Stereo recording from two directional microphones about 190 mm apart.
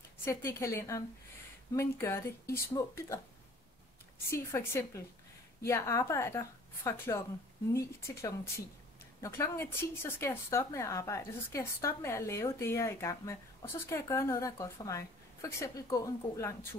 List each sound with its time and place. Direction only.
0.2 s speech: 15° left (ahead or behind)
4.3 s speech: 15° left (ahead or behind)